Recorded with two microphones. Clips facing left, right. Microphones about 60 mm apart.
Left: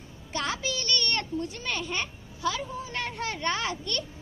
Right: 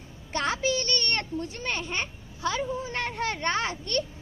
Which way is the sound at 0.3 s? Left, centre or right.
Right.